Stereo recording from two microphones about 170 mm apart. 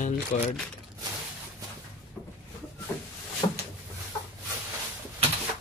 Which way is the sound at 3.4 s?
25° left (ahead or behind).